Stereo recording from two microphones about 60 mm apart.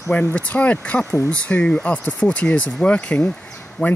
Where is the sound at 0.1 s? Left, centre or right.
Left.